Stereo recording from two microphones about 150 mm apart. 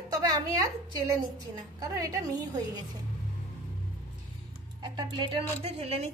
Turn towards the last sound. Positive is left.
turn(degrees=-45)  # may be behind; listen again after turning